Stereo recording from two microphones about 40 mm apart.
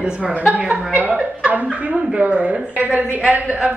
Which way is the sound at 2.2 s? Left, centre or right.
Right.